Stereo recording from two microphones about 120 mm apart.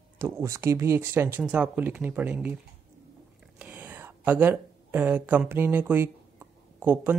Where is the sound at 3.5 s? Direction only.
10° right (ahead or behind).